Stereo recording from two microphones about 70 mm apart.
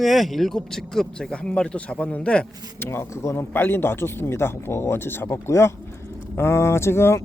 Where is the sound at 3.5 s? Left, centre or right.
Left.